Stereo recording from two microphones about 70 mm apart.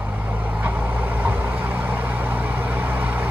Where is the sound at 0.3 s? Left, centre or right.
Right.